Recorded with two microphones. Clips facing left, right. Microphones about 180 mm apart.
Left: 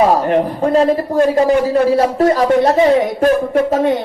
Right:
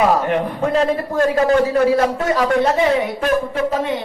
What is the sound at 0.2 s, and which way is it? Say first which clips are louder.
A woman's voice: left 4 dB; 35° left (ahead or behind).